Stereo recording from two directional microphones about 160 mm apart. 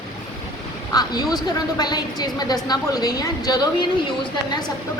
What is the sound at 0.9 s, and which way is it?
Speech, 25° left (ahead or behind).